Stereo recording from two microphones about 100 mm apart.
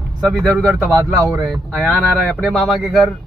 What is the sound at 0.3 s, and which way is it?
Speech, 5° left (ahead or behind).